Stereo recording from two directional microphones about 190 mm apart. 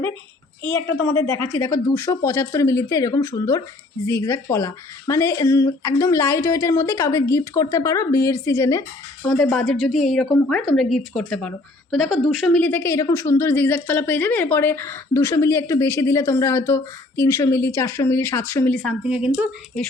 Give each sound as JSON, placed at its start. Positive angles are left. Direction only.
{"t": 1.0, "sound": "a woman's voice", "side_deg": 15}
{"t": 9.4, "sound": "a woman's voice", "side_deg": 5}